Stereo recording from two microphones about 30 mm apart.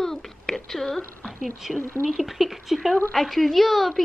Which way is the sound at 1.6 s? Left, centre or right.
Centre.